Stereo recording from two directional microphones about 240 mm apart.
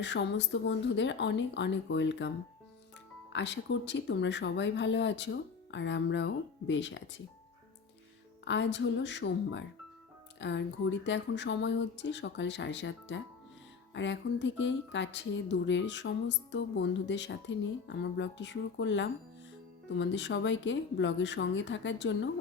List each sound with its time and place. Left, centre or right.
0.0 s speech: left
3.3 s speech: left
8.4 s speech: left